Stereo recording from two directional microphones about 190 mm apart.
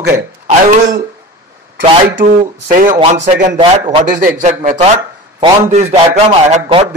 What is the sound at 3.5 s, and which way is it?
Speech, 30° right (ahead or behind).